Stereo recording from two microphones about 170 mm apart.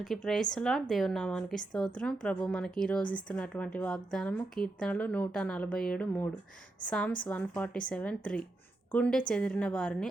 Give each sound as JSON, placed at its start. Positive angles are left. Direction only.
{"t": 0.0, "sound": "a woman's voice", "side_deg": 0}
{"t": 7.3, "sound": "a woman's voice", "side_deg": 10}